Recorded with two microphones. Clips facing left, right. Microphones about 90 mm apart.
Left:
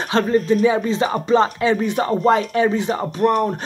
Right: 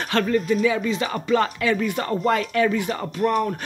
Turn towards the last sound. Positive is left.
turn(degrees=25)  # may be behind; listen again after turning